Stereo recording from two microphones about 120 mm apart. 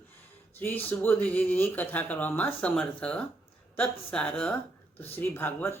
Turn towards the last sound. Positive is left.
turn(degrees=15)  # may be behind; listen again after turning